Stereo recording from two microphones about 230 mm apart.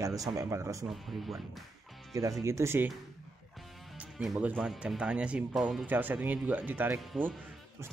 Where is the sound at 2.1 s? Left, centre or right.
Centre.